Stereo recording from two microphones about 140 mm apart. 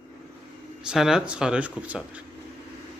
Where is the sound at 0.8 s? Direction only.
5° right (ahead or behind).